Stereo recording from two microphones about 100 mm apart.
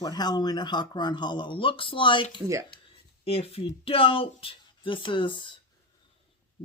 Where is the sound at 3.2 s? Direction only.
75° left (ahead or behind); by 5.5 s 55° left (ahead or behind).